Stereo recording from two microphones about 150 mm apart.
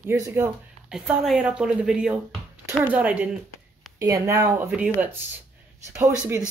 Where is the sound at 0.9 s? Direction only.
5° right (ahead or behind).